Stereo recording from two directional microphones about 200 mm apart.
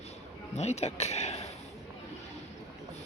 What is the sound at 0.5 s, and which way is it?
Speech, 35° left (ahead or behind).